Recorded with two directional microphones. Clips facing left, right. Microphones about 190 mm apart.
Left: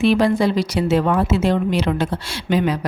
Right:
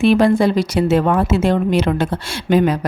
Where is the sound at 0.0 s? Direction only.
50° right (ahead or behind).